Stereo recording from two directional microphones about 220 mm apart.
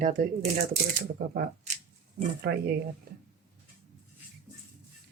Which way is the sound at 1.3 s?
40° right (ahead or behind).